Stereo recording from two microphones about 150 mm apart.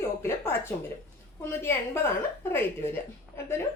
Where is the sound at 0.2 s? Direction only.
15° left (ahead or behind).